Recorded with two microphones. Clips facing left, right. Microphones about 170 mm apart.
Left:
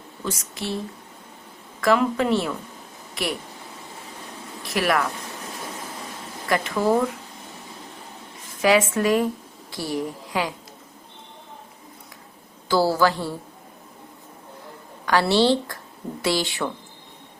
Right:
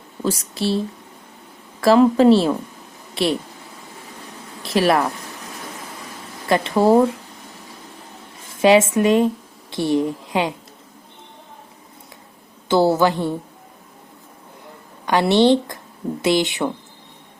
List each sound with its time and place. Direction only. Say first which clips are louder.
0.3 s a woman's voice: right 8 dB; 35° right (ahead or behind)
4.6 s speech: right 5 dB; 30° right (ahead or behind)
6.5 s a woman's voice: right 6 dB; 30° right (ahead or behind)
8.4 s a woman's voice: right 5 dB; 25° right (ahead or behind)
12.6 s a woman's voice: right 4 dB; 20° right (ahead or behind)
15.0 s a woman's voice: right 4 dB; 20° right (ahead or behind)